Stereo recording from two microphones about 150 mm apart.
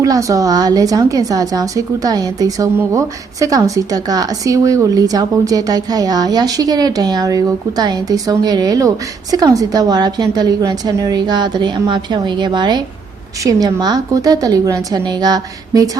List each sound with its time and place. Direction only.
0.0 s a woman's voice: 20° right (ahead or behind)